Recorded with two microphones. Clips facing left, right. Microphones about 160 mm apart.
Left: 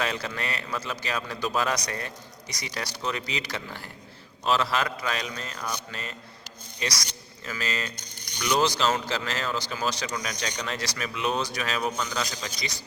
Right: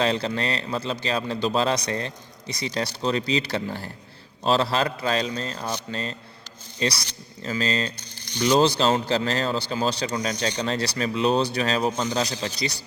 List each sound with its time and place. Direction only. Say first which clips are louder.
0.0 s a man's voice: right 6 dB; 30° right (ahead or behind)